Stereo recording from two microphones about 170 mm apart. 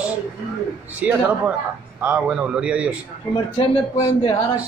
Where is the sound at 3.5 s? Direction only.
25° left (ahead or behind).